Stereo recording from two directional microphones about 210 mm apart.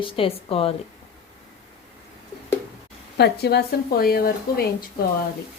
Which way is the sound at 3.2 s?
50° left (ahead or behind).